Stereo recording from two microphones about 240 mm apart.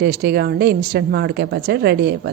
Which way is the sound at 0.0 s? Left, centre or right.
Right.